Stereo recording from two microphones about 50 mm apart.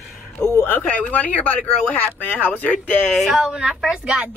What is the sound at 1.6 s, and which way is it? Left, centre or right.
Speech, left.